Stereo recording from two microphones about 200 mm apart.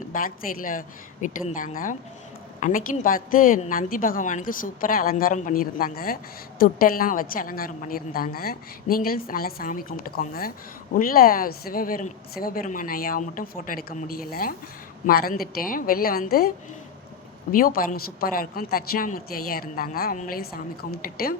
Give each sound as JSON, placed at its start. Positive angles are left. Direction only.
{"t": 0.1, "sound": "a woman's voice", "side_deg": 45}
{"t": 17.5, "sound": "a woman's voice", "side_deg": 45}